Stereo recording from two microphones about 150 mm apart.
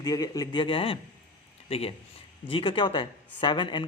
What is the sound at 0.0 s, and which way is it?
A man's voice, 25° left (ahead or behind).